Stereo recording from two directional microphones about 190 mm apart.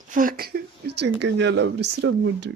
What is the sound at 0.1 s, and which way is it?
Speech, 45° right (ahead or behind).